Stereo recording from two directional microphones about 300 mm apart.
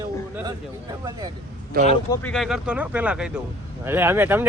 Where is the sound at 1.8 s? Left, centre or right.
Right.